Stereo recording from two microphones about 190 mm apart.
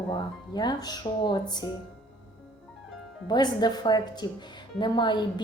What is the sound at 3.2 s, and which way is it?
Speech, 20° left (ahead or behind).